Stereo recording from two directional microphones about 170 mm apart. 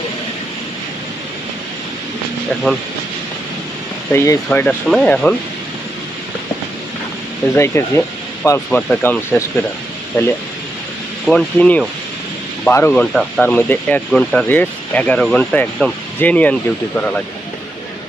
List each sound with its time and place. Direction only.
4.1 s speech: 15° left (ahead or behind)
7.5 s speech: 15° left (ahead or behind)
11.3 s speech: 5° left (ahead or behind)